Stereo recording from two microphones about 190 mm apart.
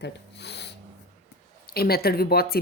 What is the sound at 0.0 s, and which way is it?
Speech, 65° left (ahead or behind).